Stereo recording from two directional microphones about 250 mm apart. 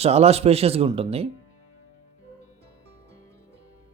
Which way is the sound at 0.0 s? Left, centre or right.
Right.